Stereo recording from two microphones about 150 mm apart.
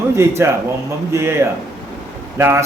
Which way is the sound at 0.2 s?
20° right (ahead or behind).